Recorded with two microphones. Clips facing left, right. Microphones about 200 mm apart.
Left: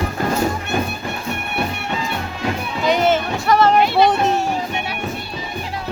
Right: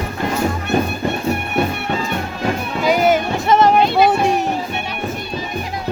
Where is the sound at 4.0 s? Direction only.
10° right (ahead or behind).